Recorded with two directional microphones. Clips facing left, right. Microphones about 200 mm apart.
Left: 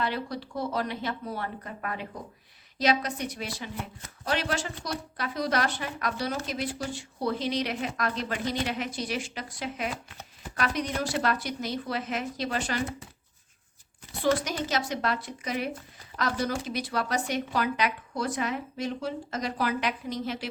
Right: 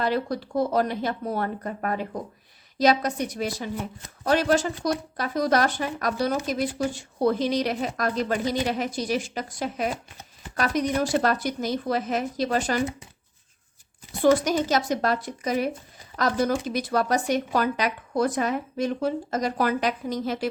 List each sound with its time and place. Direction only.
0.0 s a woman's voice: 45° right (ahead or behind)
14.4 s a woman's voice: 45° right (ahead or behind)